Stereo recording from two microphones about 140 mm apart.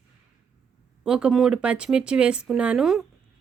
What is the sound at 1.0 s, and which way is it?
Speech, 5° right (ahead or behind).